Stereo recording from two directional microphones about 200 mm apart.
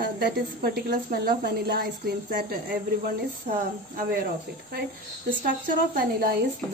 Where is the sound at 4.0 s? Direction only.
45° right (ahead or behind).